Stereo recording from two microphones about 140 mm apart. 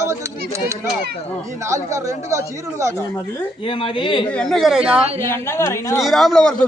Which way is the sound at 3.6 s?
40° left (ahead or behind).